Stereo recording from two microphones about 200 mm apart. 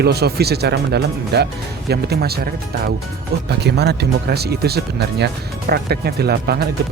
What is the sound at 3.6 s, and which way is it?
Speech, 55° right (ahead or behind).